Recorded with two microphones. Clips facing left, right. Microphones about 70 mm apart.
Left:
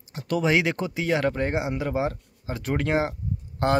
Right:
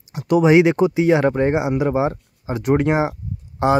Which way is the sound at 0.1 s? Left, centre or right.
Centre.